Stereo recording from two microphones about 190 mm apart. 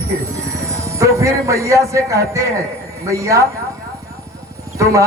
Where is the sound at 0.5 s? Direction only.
15° right (ahead or behind).